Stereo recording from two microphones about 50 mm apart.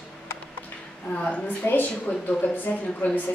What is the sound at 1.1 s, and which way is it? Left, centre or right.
A woman's voice, left.